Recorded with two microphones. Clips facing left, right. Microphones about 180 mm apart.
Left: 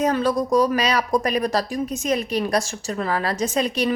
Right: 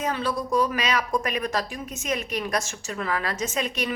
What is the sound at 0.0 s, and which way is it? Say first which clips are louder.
Speech: left 7 dB; 45° left (ahead or behind).